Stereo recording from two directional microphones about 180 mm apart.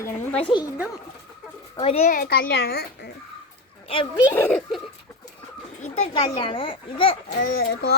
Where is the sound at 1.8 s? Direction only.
35° left (ahead or behind).